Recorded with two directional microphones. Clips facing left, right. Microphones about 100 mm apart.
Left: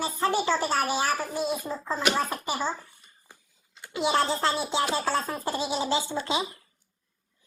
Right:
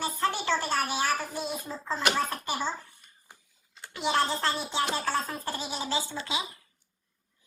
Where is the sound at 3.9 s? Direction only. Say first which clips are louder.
Left 3 dB; 10° left (ahead or behind).